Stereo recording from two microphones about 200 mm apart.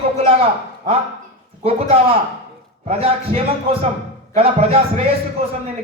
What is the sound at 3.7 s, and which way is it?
A man's voice, 30° right (ahead or behind).